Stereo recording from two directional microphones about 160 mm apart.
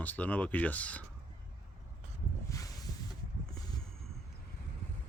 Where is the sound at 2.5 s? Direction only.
20° left (ahead or behind).